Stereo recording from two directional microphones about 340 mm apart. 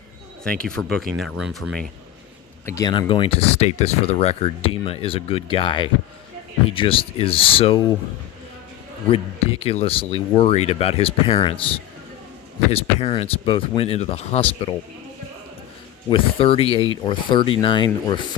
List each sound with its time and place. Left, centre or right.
0.4 s speech: centre
9.0 s speech: centre
12.7 s speech: centre
16.0 s speech: centre